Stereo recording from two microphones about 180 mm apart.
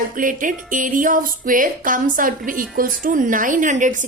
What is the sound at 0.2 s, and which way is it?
A woman's voice, 50° right (ahead or behind).